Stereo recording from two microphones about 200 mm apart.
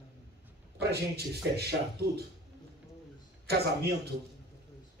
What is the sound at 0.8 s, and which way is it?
Speech, 55° right (ahead or behind).